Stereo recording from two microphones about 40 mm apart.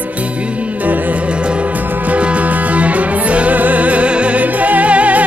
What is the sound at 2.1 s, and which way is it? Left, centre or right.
Music, right.